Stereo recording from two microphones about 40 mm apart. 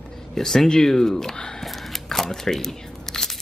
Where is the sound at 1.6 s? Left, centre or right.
Centre.